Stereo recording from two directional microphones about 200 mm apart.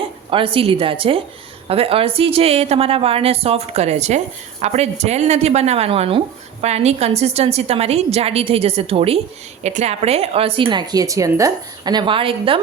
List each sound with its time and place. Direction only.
0.3 s a woman's voice: 25° right (ahead or behind)